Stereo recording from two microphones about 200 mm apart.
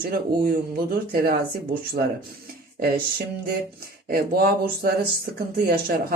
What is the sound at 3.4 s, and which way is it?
Speech, 50° right (ahead or behind).